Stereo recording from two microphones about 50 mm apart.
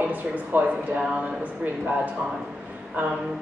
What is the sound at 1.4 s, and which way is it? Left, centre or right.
Speech, right.